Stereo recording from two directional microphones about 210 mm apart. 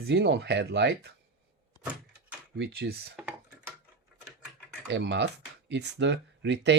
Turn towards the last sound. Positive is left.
turn(degrees=-55)  # may be behind; listen again after turning